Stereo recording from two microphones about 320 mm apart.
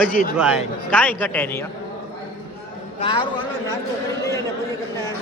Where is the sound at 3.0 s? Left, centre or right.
Centre.